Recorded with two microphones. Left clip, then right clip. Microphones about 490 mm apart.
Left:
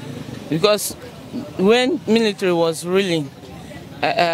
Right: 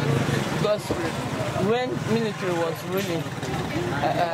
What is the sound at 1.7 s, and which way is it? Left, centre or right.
Speech, left.